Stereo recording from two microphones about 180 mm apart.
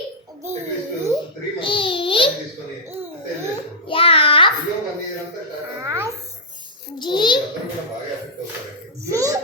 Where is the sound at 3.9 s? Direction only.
30° left (ahead or behind).